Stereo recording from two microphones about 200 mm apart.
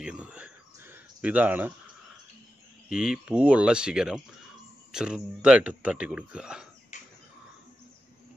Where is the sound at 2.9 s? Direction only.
5° right (ahead or behind).